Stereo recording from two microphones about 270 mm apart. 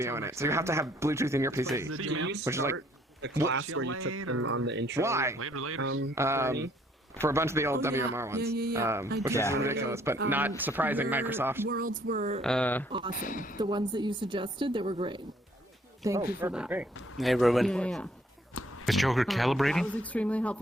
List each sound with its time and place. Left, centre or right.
0.0 s speech: centre
1.9 s speech: right
2.4 s speech: centre
2.7 s a sound: right
3.5 s speech: right
4.9 s speech: centre
5.4 s speech: right
6.1 s speech: centre
8.4 s speech: right
8.7 s speech: centre
11.7 s speech: right
12.4 s a man's voice: centre
13.1 s speech: left
13.6 s a man's voice: centre